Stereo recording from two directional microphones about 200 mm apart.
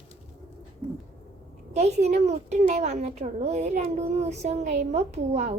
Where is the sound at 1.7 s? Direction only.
35° right (ahead or behind).